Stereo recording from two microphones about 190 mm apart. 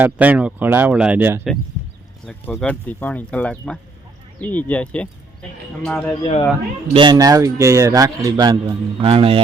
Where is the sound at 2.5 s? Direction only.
10° left (ahead or behind).